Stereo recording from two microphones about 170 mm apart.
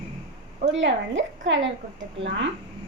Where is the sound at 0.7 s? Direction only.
90° right.